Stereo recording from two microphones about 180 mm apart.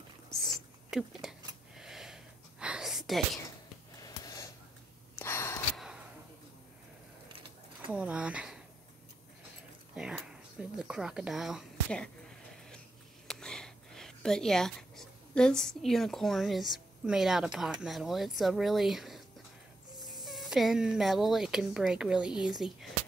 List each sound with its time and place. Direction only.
0.4 s a sound: centre (ahead or behind)
4.0 s gasp: 20° left (ahead or behind)
5.8 s a sound: 5° right (ahead or behind)
7.9 s speech: 5° right (ahead or behind)
9.9 s speech: 5° right (ahead or behind)
13.3 s speech: 5° left (ahead or behind)